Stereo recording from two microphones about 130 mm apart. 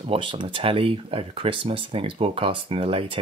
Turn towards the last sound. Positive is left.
turn(degrees=-45)  # may be behind; listen again after turning